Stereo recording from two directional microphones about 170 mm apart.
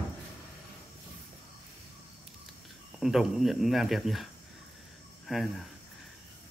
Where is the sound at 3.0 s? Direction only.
Centre (ahead or behind).